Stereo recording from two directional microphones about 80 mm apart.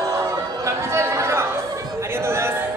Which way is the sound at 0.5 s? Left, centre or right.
Right.